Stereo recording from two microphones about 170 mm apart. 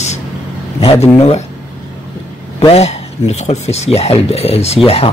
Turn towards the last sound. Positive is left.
turn(degrees=35)  # may be behind; listen again after turning